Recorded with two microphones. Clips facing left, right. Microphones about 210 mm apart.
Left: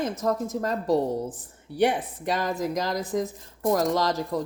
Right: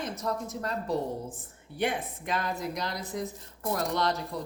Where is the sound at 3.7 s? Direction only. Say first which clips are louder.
Left 3 dB; 90° left.